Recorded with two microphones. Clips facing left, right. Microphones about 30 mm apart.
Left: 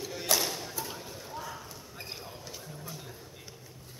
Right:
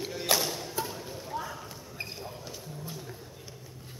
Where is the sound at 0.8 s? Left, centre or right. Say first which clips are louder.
Right 8 dB; right.